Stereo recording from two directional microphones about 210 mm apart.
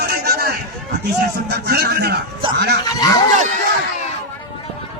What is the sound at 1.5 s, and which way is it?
Speech, 50° right (ahead or behind).